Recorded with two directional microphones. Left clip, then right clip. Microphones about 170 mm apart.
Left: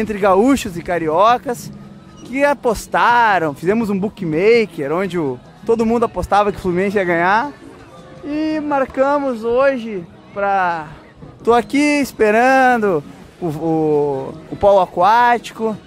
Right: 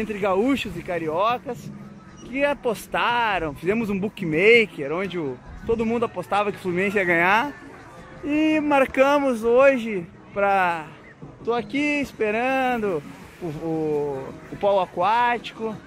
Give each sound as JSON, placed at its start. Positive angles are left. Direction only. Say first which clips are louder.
{"t": 0.0, "sound": "speech", "louder": "left 9 dB", "side_deg": 25}
{"t": 4.7, "sound": "speech", "louder": "left 7 dB", "side_deg": 20}
{"t": 8.3, "sound": "speech", "louder": "left 1 dB", "side_deg": -10}
{"t": 11.4, "sound": "speech", "louder": "left 10 dB", "side_deg": 35}
{"t": 13.5, "sound": "speech", "louder": "left 9 dB", "side_deg": 35}